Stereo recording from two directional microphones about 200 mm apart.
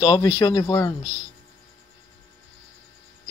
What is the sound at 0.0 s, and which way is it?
Speech, 20° left (ahead or behind).